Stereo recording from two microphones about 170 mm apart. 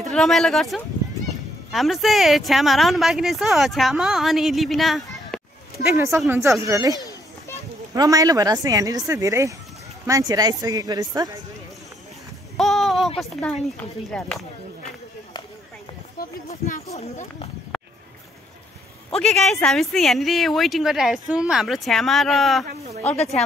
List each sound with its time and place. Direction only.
0.1 s speech: centre (ahead or behind)
5.9 s speech: 15° right (ahead or behind)
7.0 s children playing: 20° left (ahead or behind)
7.9 s speech: 20° right (ahead or behind)
12.5 s a sound: centre (ahead or behind)
13.2 s speech: 5° left (ahead or behind)
16.4 s speech: 40° left (ahead or behind)
17.7 s a sound: centre (ahead or behind)
19.1 s speech: centre (ahead or behind)